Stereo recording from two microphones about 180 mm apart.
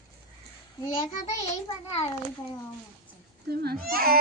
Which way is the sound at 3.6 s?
55° right (ahead or behind).